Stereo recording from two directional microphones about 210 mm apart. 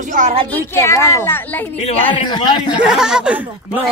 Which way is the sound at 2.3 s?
20° left (ahead or behind).